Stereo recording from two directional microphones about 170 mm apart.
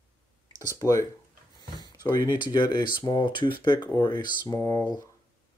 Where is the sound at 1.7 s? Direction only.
25° left (ahead or behind).